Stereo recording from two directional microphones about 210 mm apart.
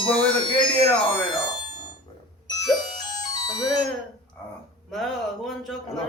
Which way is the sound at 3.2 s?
20° left (ahead or behind).